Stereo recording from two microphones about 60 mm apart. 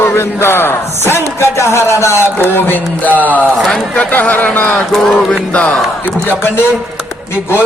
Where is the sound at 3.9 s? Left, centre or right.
Left.